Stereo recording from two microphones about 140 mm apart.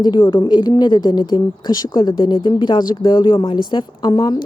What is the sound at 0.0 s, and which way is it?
Speech, 30° left (ahead or behind).